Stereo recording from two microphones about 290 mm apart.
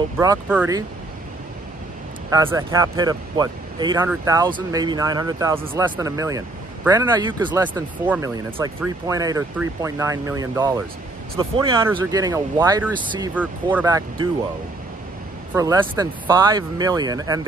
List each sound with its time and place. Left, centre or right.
0.2 s speech: centre
2.3 s speech: centre
15.5 s speech: centre